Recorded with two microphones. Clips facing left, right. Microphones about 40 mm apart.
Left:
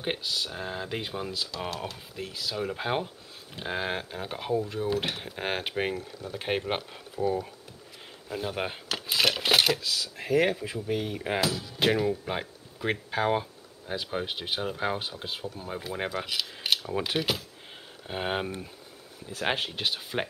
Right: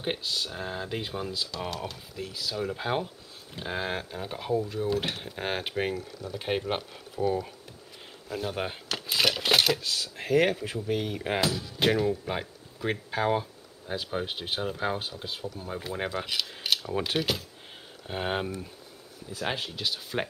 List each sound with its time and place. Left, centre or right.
0.0 s speech: centre
7.2 s speech: left
8.3 s speech: centre
9.8 s speech: right
11.0 s speech: centre
15.6 s speech: centre
19.4 s speech: left
20.0 s speech: centre